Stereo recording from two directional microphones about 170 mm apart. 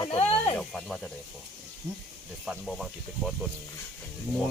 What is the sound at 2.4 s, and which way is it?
Speech, centre (ahead or behind).